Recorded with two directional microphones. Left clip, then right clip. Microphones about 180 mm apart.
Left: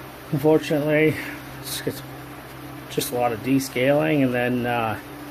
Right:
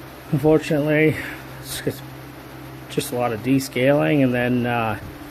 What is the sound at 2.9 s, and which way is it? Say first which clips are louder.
Speech: even; 25° right (ahead or behind).